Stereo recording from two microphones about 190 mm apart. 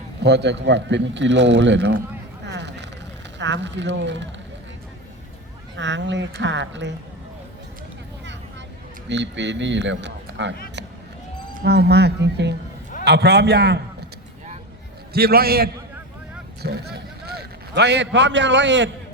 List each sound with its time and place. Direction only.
0.2 s a man's voice: 65° right (ahead or behind)
2.4 s a sound: 65° right (ahead or behind)
3.3 s a man's voice: 70° right (ahead or behind)
5.7 s a man's voice: 70° right (ahead or behind)
9.0 s a man's voice: 70° right (ahead or behind)
11.6 s speech: 60° right (ahead or behind)
15.1 s a man's voice: 55° right (ahead or behind); by 18.9 s 70° right (ahead or behind)